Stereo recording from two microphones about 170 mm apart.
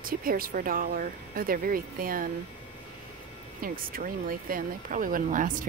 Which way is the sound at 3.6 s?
55° right (ahead or behind).